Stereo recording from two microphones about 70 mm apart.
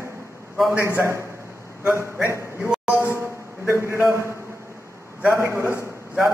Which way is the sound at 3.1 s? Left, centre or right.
Right.